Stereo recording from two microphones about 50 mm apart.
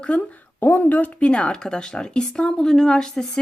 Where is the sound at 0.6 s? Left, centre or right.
Left.